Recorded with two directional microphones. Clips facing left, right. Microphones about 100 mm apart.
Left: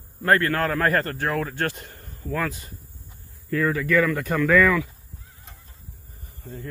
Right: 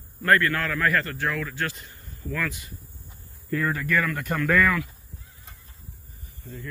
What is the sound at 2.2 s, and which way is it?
Speech, 35° left (ahead or behind).